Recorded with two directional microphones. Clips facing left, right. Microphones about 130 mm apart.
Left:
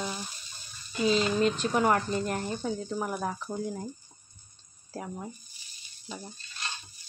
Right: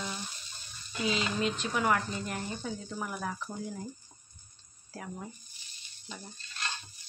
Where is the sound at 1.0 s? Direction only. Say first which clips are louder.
Left 6 dB; 40° left (ahead or behind).